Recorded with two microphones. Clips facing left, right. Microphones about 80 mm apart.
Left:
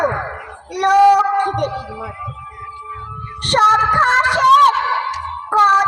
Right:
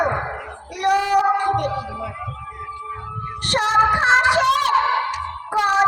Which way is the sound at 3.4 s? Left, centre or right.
Left.